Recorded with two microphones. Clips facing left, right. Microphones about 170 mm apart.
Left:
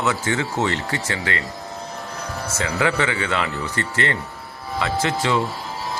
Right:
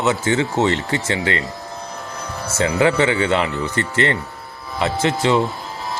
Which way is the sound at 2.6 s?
25° right (ahead or behind).